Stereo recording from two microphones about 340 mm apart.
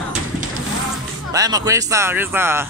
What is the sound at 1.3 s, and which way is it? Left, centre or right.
Speech, centre.